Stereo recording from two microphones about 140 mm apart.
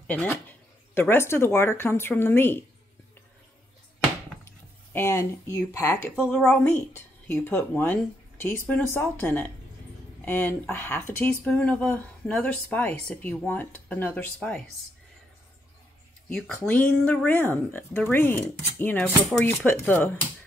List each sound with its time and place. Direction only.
0.0 s speech: 10° left (ahead or behind)
4.9 s speech: 20° left (ahead or behind)
6.3 s speech: 5° left (ahead or behind)
16.6 s speech: 10° left (ahead or behind)